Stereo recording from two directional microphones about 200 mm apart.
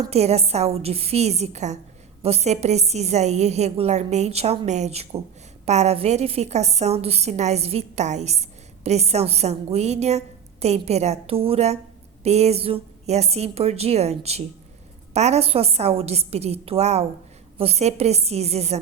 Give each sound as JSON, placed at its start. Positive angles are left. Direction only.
{"t": 0.1, "sound": "a woman's voice", "side_deg": -30}